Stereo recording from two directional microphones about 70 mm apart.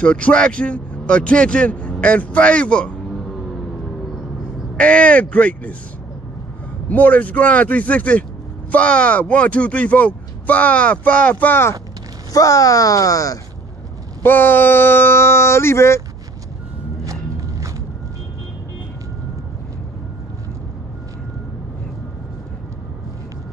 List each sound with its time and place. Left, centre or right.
0.0 s speech: centre
4.7 s speech: centre
6.9 s speech: left
12.3 s speech: left
14.2 s speech: left
17.0 s music: right